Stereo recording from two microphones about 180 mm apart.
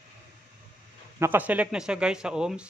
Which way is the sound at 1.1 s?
10° right (ahead or behind).